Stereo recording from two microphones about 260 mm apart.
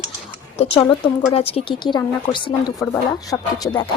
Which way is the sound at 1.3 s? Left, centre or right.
Left.